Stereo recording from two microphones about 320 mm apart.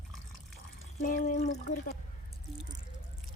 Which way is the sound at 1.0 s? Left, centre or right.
Left.